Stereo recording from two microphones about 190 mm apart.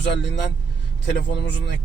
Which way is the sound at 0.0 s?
65° left (ahead or behind).